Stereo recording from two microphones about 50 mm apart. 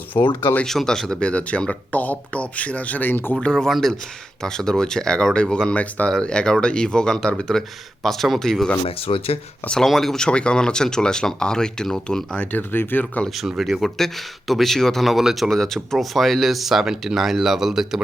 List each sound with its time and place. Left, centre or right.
0.1 s speech: left
0.6 s speech: centre
1.2 s speech: left
3.1 s speech: left
3.4 s speech: centre
6.2 s speech: centre
9.8 s speech: centre
10.2 s speech: centre
12.4 s speech: left
12.7 s speech: left
13.3 s speech: centre
15.1 s speech: centre
15.4 s speech: centre